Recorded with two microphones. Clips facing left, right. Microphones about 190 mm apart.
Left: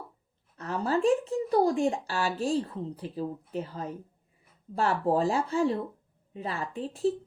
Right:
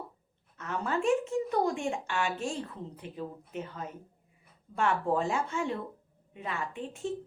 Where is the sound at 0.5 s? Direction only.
35° left (ahead or behind).